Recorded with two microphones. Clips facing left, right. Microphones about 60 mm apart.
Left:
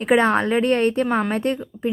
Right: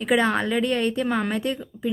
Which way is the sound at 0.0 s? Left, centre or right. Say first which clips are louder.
Left 4 dB; left.